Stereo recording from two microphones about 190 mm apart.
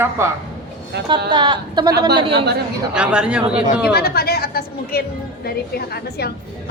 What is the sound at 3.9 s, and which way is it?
A woman's voice, 55° left (ahead or behind).